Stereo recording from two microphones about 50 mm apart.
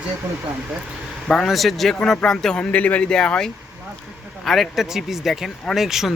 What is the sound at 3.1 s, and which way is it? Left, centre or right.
Speech, centre.